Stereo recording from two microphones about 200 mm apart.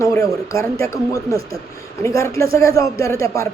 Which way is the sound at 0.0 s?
15° left (ahead or behind).